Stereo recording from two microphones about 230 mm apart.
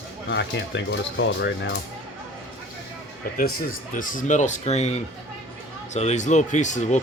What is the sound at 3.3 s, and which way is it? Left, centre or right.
Speech, left.